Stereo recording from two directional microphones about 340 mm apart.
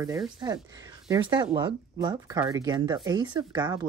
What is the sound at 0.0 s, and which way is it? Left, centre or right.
Speech, centre.